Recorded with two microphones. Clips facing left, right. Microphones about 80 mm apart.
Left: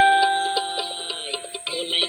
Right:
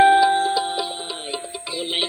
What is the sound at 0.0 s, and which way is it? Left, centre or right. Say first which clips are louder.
Music: right 3 dB; right.